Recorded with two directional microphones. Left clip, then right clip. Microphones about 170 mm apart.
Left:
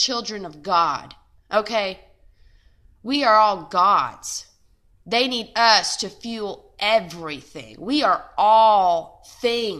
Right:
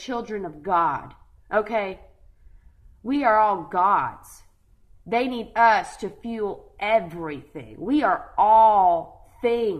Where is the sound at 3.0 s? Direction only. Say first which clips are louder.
Left 3 dB; 25° left (ahead or behind).